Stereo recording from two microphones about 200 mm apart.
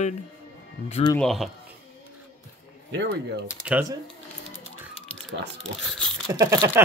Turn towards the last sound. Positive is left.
turn(degrees=-15)  # may be behind; listen again after turning